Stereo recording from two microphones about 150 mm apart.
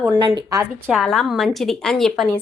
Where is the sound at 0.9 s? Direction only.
5° left (ahead or behind).